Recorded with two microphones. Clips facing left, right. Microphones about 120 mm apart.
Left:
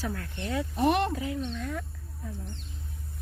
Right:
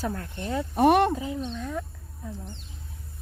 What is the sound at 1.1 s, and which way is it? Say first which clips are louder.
Speech: right 1 dB; 20° right (ahead or behind).